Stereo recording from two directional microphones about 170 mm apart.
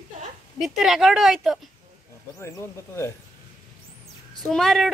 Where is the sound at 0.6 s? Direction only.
Centre (ahead or behind).